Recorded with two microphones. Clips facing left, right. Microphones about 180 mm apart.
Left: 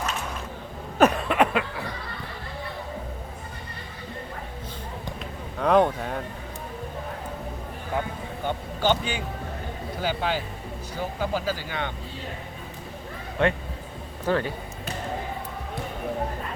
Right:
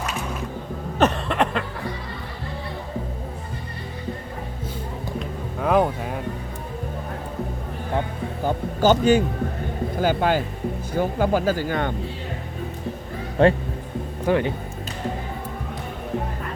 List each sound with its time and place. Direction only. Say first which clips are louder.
0.9 s a sound: left 1 dB; 5° left (ahead or behind)
5.5 s a sound: even; 5° right (ahead or behind)
8.4 s vehicle: right 6 dB; 45° right (ahead or behind)
10.0 s speech: right 7 dB; 50° right (ahead or behind)
13.4 s speech: right 7 dB; 35° right (ahead or behind)
14.3 s speech: right 4 dB; 15° right (ahead or behind)